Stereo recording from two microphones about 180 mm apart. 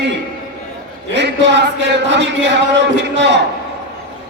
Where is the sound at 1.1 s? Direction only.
75° right (ahead or behind).